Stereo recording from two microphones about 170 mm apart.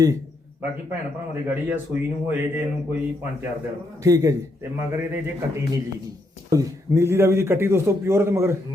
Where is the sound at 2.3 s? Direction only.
10° right (ahead or behind).